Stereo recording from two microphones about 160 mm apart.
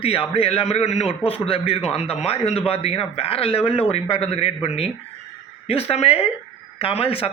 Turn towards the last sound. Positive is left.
turn(degrees=35)  # may be behind; listen again after turning